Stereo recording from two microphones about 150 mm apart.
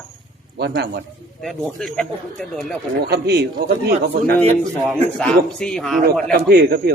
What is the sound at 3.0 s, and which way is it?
Speech, 90° right.